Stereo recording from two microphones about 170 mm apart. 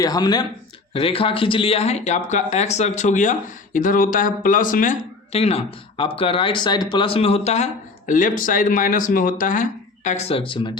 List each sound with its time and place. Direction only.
0.0 s speech: 20° left (ahead or behind)
0.9 s speech: 35° left (ahead or behind); by 4.9 s 50° left (ahead or behind)
5.3 s speech: 35° left (ahead or behind)